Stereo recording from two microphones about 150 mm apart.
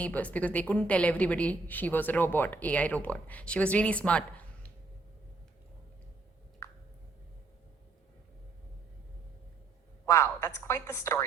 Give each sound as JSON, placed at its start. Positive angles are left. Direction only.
{"t": 0.0, "sound": "a woman's voice", "side_deg": 10}
{"t": 6.6, "sound": "a sound", "side_deg": 20}
{"t": 10.1, "sound": "a woman's voice", "side_deg": 20}